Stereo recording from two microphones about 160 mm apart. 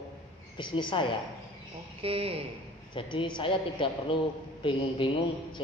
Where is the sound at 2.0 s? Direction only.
35° right (ahead or behind).